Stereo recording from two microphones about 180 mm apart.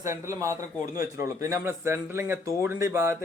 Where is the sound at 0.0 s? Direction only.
15° right (ahead or behind).